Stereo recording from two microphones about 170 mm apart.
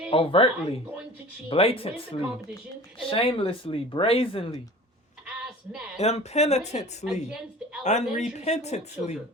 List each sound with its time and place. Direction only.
0.1 s speech: 30° left (ahead or behind)
5.2 s a sound: 5° right (ahead or behind)
6.0 s speech: 40° left (ahead or behind)
7.0 s a woman's voice: 5° right (ahead or behind)
7.9 s speech: 45° left (ahead or behind)